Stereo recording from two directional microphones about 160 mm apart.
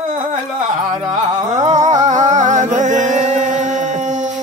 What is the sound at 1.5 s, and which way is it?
Music, 45° right (ahead or behind).